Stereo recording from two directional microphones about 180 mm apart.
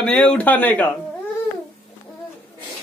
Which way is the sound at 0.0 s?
5° left (ahead or behind).